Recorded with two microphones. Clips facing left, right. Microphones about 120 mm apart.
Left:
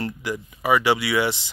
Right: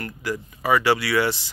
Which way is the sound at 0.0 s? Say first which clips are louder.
Left 1 dB; 20° left (ahead or behind).